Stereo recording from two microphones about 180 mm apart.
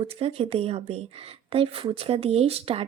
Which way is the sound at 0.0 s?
35° right (ahead or behind).